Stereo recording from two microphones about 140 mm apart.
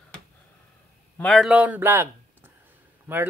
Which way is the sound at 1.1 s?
10° left (ahead or behind).